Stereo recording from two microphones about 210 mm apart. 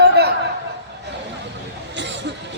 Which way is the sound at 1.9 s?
60° right (ahead or behind).